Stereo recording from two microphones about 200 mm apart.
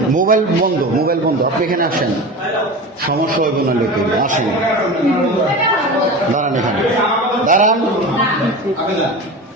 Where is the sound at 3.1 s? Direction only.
45° right (ahead or behind).